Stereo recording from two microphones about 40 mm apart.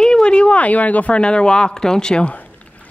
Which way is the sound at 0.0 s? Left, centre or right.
Left.